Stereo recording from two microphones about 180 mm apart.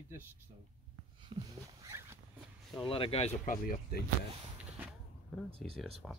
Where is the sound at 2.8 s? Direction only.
30° left (ahead or behind).